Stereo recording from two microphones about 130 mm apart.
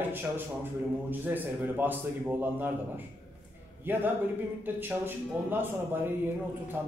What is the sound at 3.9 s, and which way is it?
A man's voice, 15° right (ahead or behind).